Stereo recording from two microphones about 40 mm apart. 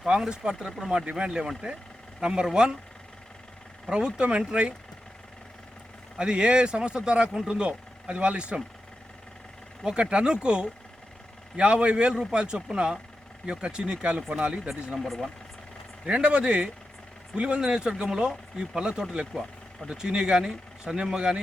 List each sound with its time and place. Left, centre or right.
0.1 s speech: centre
3.9 s speech: right
6.1 s speech: right
9.8 s speech: right
14.7 s speech: centre
15.0 s speech: centre
16.0 s speech: right